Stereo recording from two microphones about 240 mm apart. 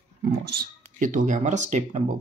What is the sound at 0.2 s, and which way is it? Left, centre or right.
Speech, right.